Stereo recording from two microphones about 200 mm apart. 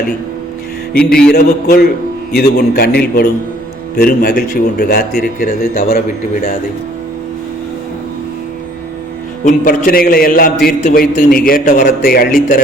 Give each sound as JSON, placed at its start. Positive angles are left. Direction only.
{"t": 0.9, "sound": "music", "side_deg": 5}
{"t": 1.3, "sound": "speech", "side_deg": 55}
{"t": 5.1, "sound": "a man's voice", "side_deg": 40}
{"t": 9.6, "sound": "speech", "side_deg": 45}